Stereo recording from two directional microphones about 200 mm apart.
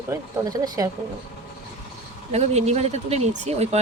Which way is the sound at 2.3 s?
35° right (ahead or behind).